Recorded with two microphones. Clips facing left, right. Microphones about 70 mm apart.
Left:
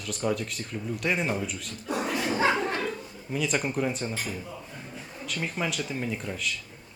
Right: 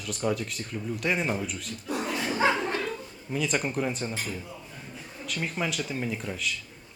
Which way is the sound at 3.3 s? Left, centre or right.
Centre.